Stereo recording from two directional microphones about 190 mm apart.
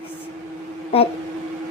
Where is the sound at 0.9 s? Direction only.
30° left (ahead or behind).